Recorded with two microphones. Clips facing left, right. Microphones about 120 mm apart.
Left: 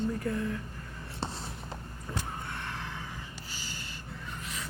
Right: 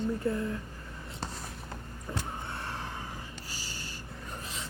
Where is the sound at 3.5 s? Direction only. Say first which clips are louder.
Left 1 dB; 35° right (ahead or behind).